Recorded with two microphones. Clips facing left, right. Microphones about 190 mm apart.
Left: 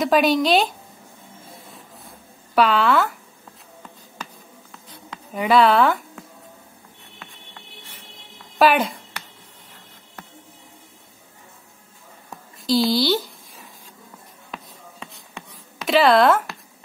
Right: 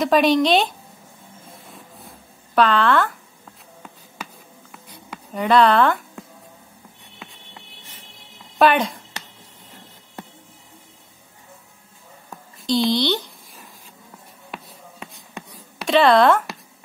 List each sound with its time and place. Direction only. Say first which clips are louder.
0.0 s a woman's voice: right 1 dB; centre (ahead or behind)
2.5 s a woman's voice: even; 5° left (ahead or behind)
5.3 s a woman's voice: even; 5° left (ahead or behind)
7.2 s music: right 2 dB; 15° right (ahead or behind)
8.5 s a woman's voice: even; centre (ahead or behind)
12.3 s a sound: left 1 dB; 5° left (ahead or behind)
14.5 s a sound: right 1 dB; 10° right (ahead or behind)
15.9 s a woman's voice: right 1 dB; centre (ahead or behind)